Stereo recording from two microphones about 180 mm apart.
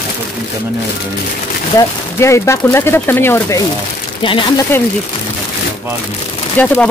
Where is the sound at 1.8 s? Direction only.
15° left (ahead or behind).